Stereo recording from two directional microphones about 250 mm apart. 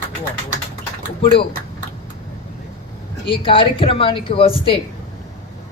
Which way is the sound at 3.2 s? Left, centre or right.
Left.